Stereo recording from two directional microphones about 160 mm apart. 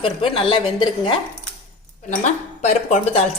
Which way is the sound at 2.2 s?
50° left (ahead or behind).